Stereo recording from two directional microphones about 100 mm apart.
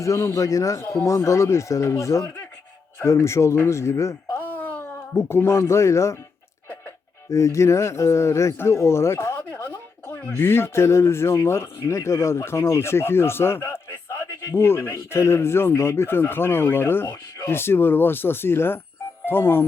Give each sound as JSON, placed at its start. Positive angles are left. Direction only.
{"t": 0.0, "sound": "a man's voice", "side_deg": 30}
{"t": 7.3, "sound": "speech", "side_deg": 30}